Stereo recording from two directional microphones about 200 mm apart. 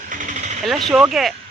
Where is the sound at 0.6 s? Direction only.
Centre (ahead or behind).